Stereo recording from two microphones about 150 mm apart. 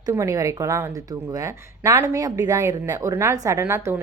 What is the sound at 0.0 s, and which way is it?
Speech, 20° right (ahead or behind).